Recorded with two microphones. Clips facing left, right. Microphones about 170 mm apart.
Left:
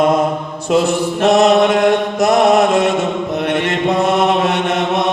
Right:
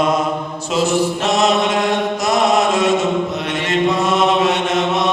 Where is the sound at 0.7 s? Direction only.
60° left (ahead or behind).